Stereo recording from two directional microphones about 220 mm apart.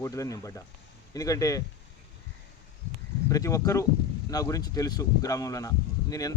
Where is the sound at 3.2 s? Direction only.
15° left (ahead or behind).